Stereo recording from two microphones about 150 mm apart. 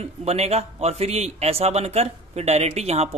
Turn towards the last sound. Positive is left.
turn(degrees=-45)  # may be behind; listen again after turning